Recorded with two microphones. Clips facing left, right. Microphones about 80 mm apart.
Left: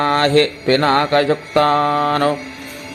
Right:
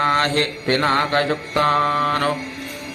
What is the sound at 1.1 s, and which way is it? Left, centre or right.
Mantra, left.